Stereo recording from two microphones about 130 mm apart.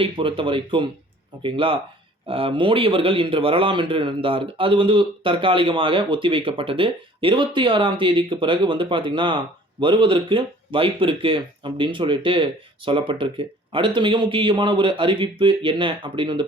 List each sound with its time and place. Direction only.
0.0 s a man's voice: 40° right (ahead or behind)